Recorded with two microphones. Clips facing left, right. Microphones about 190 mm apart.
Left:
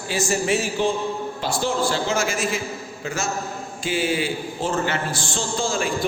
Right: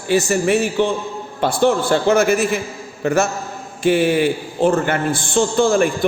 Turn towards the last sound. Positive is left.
turn(degrees=-55)  # may be behind; listen again after turning